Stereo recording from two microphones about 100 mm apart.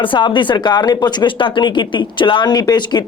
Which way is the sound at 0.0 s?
55° left (ahead or behind).